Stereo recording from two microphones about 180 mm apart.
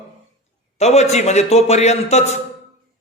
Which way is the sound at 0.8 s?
35° left (ahead or behind).